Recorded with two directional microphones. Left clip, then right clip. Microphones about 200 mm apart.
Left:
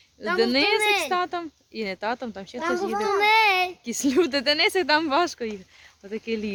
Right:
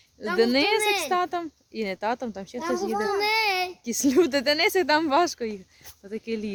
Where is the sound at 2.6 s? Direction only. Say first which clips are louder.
Left 2 dB; 10° left (ahead or behind).